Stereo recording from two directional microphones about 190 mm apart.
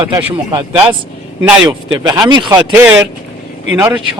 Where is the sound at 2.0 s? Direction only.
20° right (ahead or behind).